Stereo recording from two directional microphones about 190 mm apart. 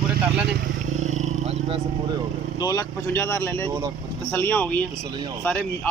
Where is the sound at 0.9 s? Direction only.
40° right (ahead or behind).